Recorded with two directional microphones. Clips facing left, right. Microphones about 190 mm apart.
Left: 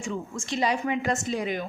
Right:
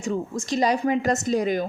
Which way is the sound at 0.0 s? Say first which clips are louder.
Right 6 dB; 40° right (ahead or behind).